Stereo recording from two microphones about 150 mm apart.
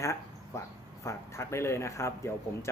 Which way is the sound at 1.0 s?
20° left (ahead or behind).